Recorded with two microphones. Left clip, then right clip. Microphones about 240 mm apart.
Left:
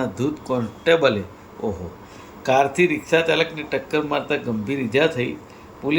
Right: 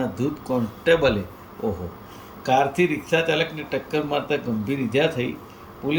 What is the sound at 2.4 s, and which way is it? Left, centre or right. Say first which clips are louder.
A man's voice: left 2 dB; centre.